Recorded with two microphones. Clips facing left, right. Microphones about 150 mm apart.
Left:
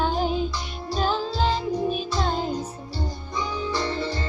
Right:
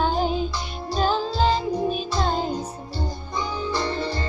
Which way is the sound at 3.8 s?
35° right (ahead or behind).